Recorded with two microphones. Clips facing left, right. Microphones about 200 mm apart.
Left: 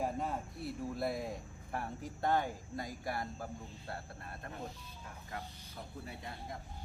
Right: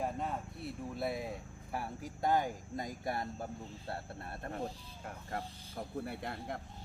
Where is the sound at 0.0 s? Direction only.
Centre (ahead or behind); by 4.7 s 30° right (ahead or behind).